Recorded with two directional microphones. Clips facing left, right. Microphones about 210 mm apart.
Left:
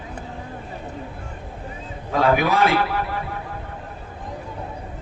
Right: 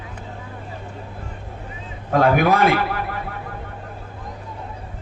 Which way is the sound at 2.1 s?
50° right (ahead or behind).